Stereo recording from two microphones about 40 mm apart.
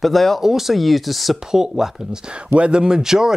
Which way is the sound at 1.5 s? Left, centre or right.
Centre.